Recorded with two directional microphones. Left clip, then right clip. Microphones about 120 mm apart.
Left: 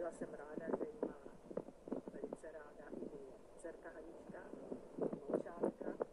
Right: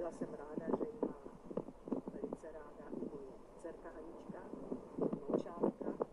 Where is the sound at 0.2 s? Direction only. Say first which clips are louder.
Right 3 dB; 10° left (ahead or behind).